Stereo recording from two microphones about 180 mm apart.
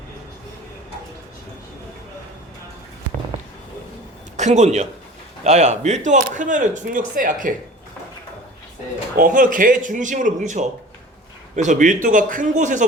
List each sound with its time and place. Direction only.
4.4 s a man's voice: 40° right (ahead or behind)
9.1 s speech: 50° right (ahead or behind)